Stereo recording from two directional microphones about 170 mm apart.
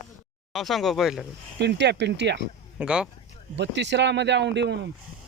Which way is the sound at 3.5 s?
90° right.